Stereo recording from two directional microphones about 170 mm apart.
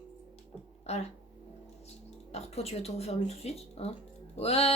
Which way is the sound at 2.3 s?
40° left (ahead or behind).